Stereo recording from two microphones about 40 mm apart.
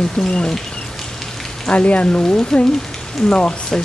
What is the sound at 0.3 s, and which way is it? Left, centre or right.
Speech, left.